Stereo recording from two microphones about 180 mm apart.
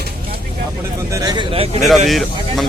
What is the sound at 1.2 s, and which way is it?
Speech, 25° right (ahead or behind).